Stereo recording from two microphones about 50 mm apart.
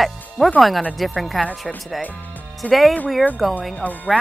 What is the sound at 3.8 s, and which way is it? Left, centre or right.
Speech, left.